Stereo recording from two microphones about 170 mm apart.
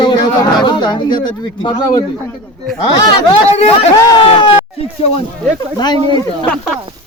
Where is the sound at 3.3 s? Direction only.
40° left (ahead or behind).